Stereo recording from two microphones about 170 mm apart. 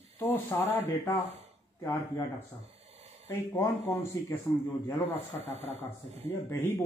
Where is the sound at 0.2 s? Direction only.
15° left (ahead or behind).